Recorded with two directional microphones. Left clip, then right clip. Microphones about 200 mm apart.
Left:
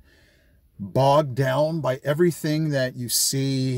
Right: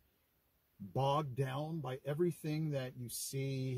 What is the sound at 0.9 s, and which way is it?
Speech, 5° left (ahead or behind).